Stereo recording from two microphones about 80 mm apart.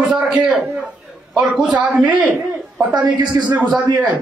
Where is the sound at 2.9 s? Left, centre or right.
Right.